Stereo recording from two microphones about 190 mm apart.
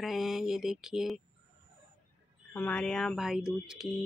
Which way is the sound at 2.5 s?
5° left (ahead or behind).